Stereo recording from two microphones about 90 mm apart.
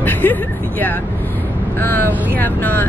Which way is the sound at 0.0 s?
20° left (ahead or behind).